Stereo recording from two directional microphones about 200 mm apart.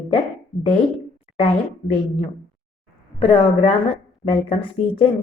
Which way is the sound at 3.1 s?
25° left (ahead or behind).